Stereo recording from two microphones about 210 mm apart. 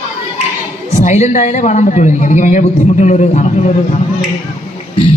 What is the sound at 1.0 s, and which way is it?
A man's voice, 35° left (ahead or behind).